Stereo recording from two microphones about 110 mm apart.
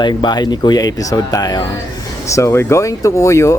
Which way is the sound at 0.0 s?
40° left (ahead or behind).